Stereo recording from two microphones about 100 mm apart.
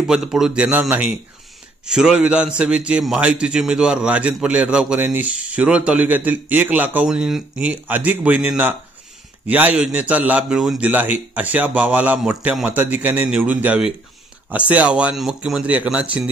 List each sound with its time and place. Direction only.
0.0 s a man's voice: 5° right (ahead or behind)
7.1 s a man's voice: 5° right (ahead or behind)
10.5 s speech: centre (ahead or behind)
10.8 s a man's voice: 20° right (ahead or behind)